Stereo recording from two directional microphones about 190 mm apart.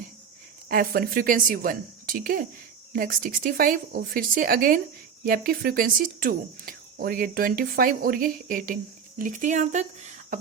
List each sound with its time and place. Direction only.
0.7 s speech: 50° right (ahead or behind)